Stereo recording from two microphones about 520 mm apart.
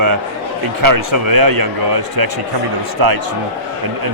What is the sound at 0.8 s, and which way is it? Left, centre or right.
Speech, right.